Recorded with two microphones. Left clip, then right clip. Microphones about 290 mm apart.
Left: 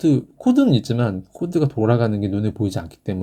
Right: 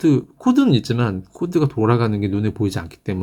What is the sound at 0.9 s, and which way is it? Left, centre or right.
Speech, centre.